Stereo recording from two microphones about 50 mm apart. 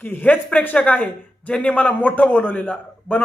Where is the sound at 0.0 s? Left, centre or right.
Left.